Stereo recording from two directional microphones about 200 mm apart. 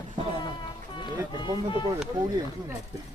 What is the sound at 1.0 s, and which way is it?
Speech, 20° left (ahead or behind).